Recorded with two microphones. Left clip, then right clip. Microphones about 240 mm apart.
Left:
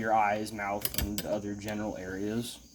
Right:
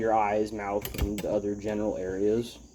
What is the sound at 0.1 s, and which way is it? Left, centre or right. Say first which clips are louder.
Speech: left 1 dB; left.